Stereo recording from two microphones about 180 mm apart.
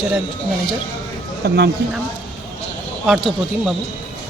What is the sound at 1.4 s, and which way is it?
Speech, 65° right (ahead or behind).